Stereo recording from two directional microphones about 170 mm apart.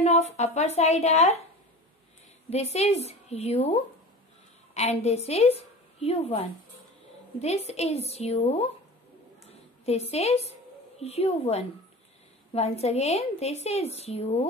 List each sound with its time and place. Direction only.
0.0 s a woman's voice: 40° left (ahead or behind)
2.5 s a woman's voice: 40° left (ahead or behind)